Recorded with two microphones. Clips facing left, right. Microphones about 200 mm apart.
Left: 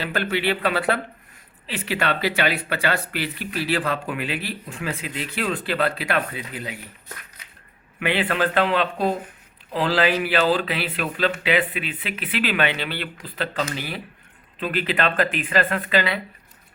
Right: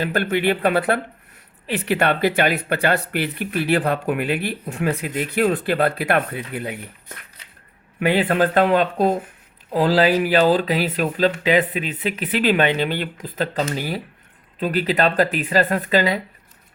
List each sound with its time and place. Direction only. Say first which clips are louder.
0.0 s speech: right 4 dB; 50° right (ahead or behind)
7.9 s speech: right 5 dB; 40° right (ahead or behind)